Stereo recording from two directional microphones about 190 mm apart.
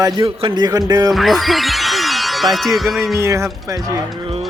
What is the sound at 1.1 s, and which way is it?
Speech, centre (ahead or behind).